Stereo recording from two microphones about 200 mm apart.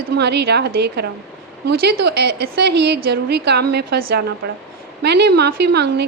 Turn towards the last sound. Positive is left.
turn(degrees=-55)  # may be behind; listen again after turning